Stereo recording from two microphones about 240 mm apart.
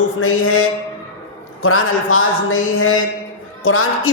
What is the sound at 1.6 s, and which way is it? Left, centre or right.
Speech, left.